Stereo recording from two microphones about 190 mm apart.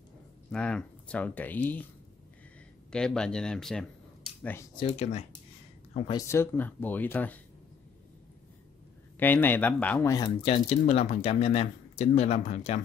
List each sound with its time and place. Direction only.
0.5 s speech: 5° left (ahead or behind)
2.9 s speech: 5° left (ahead or behind)
4.9 s speech: 35° left (ahead or behind)
6.1 s speech: 15° left (ahead or behind)
9.2 s speech: 10° left (ahead or behind); by 12.8 s 35° left (ahead or behind)